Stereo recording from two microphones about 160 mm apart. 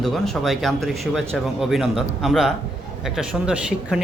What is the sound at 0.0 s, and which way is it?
A man's voice, centre (ahead or behind).